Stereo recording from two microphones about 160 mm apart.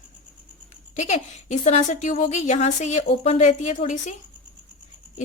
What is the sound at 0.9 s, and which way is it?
A woman's voice, 45° left (ahead or behind).